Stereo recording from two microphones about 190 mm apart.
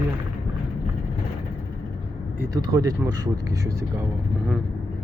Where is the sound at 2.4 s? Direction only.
20° right (ahead or behind).